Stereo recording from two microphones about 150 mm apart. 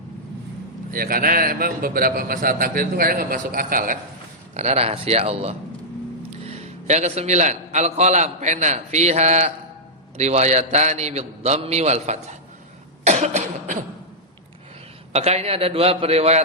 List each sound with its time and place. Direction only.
0.9 s a man's voice: 75° right (ahead or behind)
4.5 s a man's voice: 45° right (ahead or behind)
13.1 s cough: 50° right (ahead or behind)
15.1 s a man's voice: 45° right (ahead or behind)